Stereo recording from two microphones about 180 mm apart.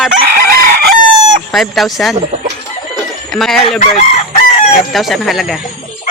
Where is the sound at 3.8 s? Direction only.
40° left (ahead or behind).